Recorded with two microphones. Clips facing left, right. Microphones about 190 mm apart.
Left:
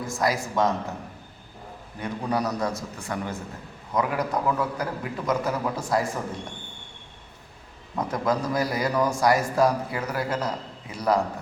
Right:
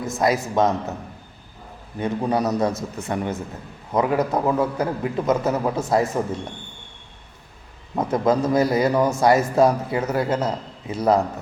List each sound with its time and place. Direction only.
0.0 s a man's voice: 20° right (ahead or behind)
2.0 s a man's voice: 25° right (ahead or behind)
7.9 s a man's voice: 25° right (ahead or behind)